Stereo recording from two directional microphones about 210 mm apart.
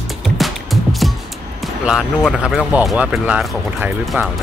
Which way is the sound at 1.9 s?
Centre (ahead or behind).